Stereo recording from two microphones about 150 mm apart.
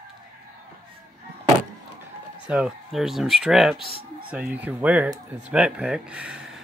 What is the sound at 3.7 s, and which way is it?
Speech, 35° left (ahead or behind).